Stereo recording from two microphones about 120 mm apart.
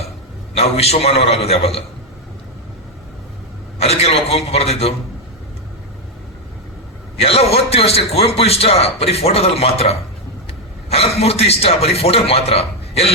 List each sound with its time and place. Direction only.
0.5 s a man's voice: 60° left (ahead or behind)
3.8 s a man's voice: 60° left (ahead or behind)
7.2 s a man's voice: 55° left (ahead or behind)